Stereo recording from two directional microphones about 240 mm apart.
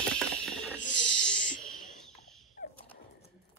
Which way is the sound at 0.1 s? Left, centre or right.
Centre.